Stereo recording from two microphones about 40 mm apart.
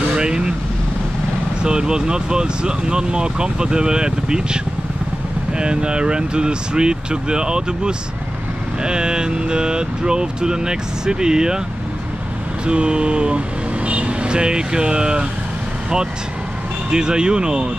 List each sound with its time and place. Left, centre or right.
0.0 s vehicle: right
1.6 s speech: right
12.6 s speech: right
16.9 s speech: centre